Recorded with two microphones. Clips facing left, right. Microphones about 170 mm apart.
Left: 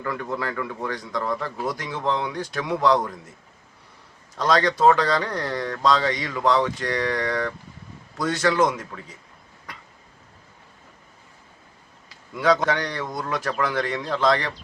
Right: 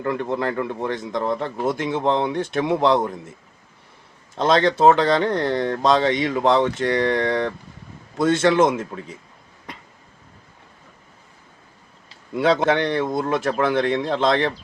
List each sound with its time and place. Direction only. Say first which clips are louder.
0.0 s speech: right 5 dB; 25° right (ahead or behind)
4.4 s speech: right 3 dB; 25° right (ahead or behind)
12.0 s speech: right 2 dB; 25° right (ahead or behind)